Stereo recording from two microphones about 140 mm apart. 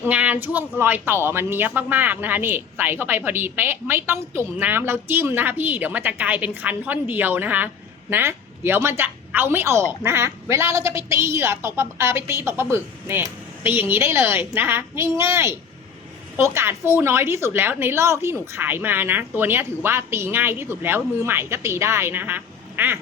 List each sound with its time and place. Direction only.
0.0 s a woman's voice: 10° right (ahead or behind)